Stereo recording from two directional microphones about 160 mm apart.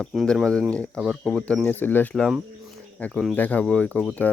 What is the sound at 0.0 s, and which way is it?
Speech, centre (ahead or behind).